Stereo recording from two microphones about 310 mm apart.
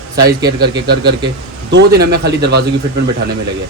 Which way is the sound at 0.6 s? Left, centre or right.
Right.